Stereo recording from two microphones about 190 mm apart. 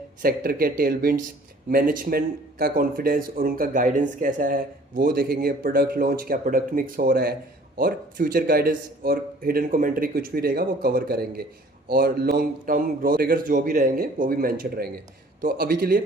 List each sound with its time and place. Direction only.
0.2 s speech: 50° right (ahead or behind)